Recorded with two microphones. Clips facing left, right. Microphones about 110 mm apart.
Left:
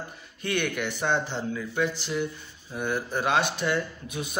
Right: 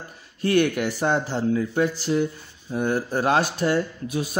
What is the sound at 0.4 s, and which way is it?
Speech, 35° right (ahead or behind).